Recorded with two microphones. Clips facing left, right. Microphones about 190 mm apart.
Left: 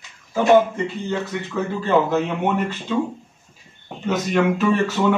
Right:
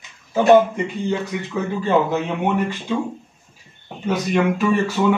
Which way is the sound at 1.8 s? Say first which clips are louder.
Even; 15° right (ahead or behind).